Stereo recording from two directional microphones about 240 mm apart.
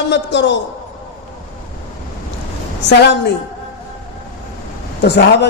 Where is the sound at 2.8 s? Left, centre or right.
Left.